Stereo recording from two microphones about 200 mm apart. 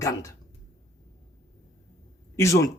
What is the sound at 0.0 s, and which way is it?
Speech, 15° left (ahead or behind).